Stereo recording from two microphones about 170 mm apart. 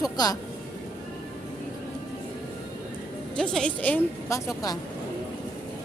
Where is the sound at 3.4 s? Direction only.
5° left (ahead or behind).